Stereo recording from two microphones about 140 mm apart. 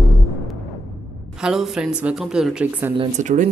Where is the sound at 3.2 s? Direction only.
60° right (ahead or behind).